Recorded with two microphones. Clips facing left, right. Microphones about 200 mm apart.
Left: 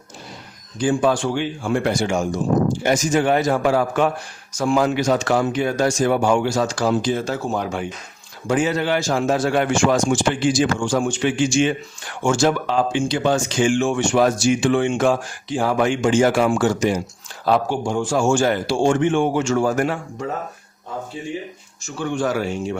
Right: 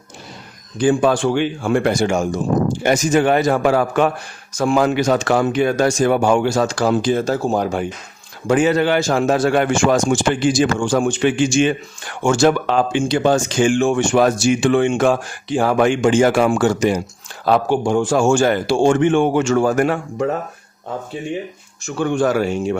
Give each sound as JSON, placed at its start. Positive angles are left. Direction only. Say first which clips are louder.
{"t": 0.8, "sound": "a man's voice", "louder": "right 3 dB", "side_deg": -60}
{"t": 2.8, "sound": "a man's voice", "louder": "right 3 dB", "side_deg": -60}
{"t": 8.4, "sound": "a man's voice", "louder": "right 5 dB", "side_deg": -65}
{"t": 13.2, "sound": "a man's voice", "louder": "right 3 dB", "side_deg": -45}
{"t": 21.8, "sound": "a man's voice", "louder": "right 5 dB", "side_deg": -60}